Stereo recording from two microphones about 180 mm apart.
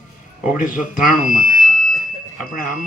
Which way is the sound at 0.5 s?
45° left (ahead or behind).